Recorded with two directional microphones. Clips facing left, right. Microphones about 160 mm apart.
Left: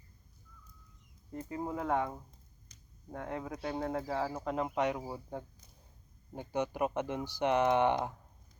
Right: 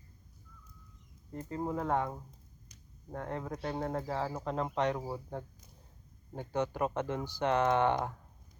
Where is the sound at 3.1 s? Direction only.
10° left (ahead or behind).